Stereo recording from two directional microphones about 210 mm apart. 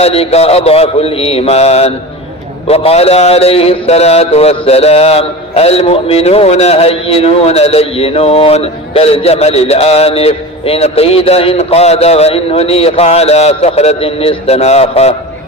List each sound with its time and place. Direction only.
0.0 s a man's voice: 30° left (ahead or behind)